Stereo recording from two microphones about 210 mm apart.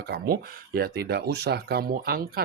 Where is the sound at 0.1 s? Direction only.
45° right (ahead or behind).